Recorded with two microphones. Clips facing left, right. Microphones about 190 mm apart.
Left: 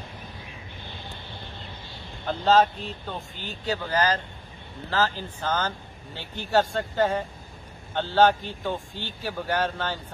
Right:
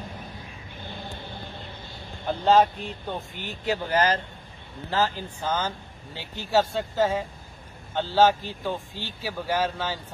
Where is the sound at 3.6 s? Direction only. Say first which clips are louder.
Right 1 dB; 25° right (ahead or behind).